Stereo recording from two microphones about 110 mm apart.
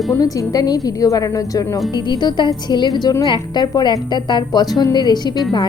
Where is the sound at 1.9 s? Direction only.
45° left (ahead or behind).